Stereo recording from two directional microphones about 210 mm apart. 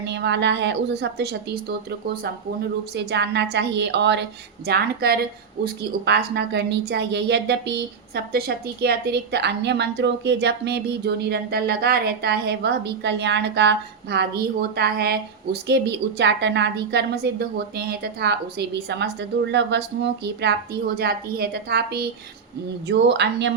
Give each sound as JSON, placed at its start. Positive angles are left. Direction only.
{"t": 0.0, "sound": "a woman's voice", "side_deg": -55}